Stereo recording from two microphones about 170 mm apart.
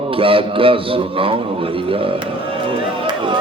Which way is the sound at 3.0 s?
30° right (ahead or behind).